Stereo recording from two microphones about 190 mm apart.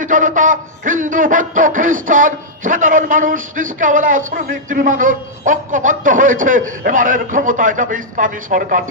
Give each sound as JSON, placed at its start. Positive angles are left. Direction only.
{"t": 0.0, "sound": "a man's voice", "side_deg": -45}